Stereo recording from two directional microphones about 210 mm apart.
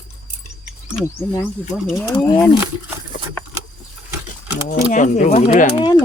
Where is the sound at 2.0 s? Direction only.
15° left (ahead or behind).